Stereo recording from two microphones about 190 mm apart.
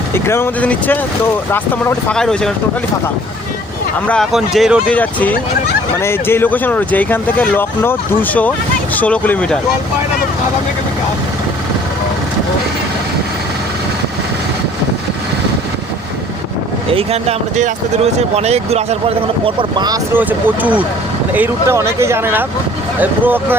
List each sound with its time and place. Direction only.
0.1 s speech: 10° left (ahead or behind)
4.0 s speech: 5° left (ahead or behind)
16.9 s speech: 30° right (ahead or behind)
20.1 s speech: 10° right (ahead or behind)